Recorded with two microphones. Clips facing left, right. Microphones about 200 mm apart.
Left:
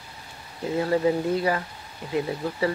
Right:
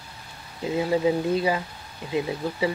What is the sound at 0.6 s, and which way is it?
Speech, 15° right (ahead or behind).